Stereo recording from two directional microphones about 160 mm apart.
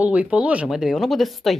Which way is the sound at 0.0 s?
10° right (ahead or behind).